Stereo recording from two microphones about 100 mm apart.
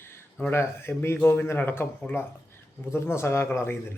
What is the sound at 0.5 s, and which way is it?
A man's voice, 20° left (ahead or behind).